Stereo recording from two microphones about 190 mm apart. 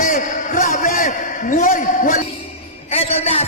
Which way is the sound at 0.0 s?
40° left (ahead or behind).